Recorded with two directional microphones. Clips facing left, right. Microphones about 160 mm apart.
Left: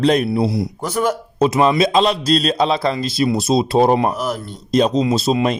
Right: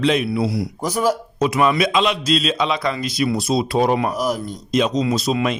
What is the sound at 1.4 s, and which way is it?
A man's voice, 30° left (ahead or behind).